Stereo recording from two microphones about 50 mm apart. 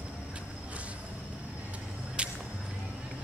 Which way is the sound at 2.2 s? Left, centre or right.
Right.